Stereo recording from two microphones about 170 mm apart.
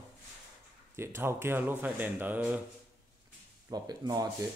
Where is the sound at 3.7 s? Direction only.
25° right (ahead or behind).